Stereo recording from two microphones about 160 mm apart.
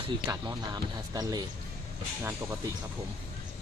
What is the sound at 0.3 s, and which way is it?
Speech, 25° right (ahead or behind).